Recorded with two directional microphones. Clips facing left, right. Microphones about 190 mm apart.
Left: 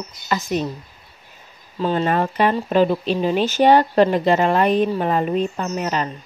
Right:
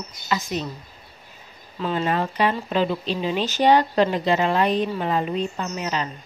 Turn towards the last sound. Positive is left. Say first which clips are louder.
# left 4 dB
turn(degrees=50)  # may be behind; listen again after turning